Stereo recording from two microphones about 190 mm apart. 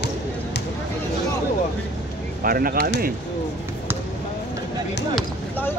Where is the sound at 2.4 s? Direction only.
50° right (ahead or behind).